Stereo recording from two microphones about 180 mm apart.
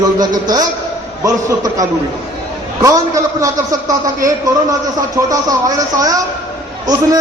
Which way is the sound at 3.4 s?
20° right (ahead or behind).